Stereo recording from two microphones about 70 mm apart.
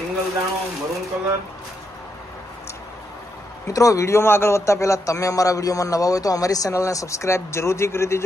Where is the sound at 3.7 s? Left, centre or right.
Left.